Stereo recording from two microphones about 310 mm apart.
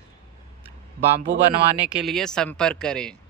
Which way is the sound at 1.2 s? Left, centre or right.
Right.